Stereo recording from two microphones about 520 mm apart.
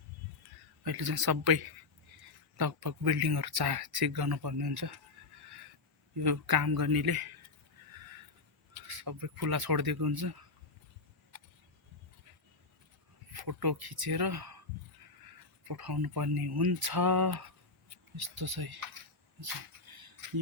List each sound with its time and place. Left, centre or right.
0.9 s speech: right
6.2 s speech: right
8.7 s speech: right
13.3 s speech: right
15.6 s speech: right